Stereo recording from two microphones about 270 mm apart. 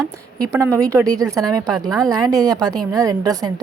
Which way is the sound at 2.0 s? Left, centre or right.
Centre.